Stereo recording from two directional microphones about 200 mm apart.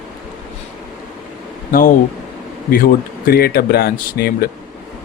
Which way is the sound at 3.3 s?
50° left (ahead or behind).